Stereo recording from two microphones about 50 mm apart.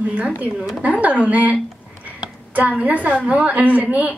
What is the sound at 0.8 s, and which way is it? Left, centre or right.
A woman's voice, right.